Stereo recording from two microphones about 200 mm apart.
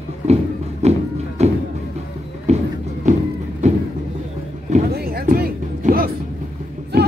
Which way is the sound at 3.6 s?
35° right (ahead or behind).